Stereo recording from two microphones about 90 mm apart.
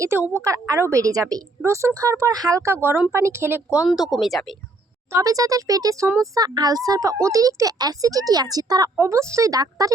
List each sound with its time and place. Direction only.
0.4 s speech: 35° right (ahead or behind)
3.8 s speech: centre (ahead or behind)
5.1 s speech: 40° right (ahead or behind)